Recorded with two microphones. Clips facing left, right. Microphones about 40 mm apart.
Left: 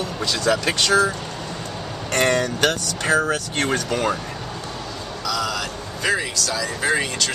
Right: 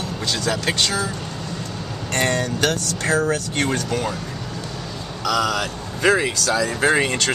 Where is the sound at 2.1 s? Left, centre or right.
Left.